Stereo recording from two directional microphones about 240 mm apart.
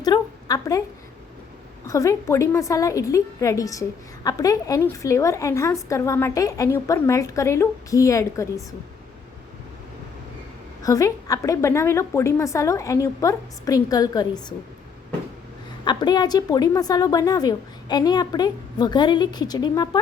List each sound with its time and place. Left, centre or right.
0.0 s a sound: centre
1.9 s a woman's voice: centre
10.8 s a woman's voice: centre
15.8 s a woman's voice: centre